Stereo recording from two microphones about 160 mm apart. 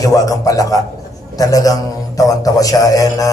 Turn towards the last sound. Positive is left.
turn(degrees=20)  # may be behind; listen again after turning